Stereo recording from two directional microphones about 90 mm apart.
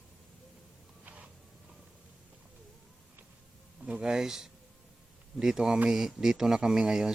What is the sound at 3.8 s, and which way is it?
Speech, 10° right (ahead or behind).